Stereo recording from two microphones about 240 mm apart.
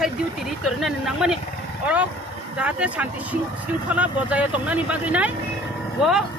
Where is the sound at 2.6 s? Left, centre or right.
Centre.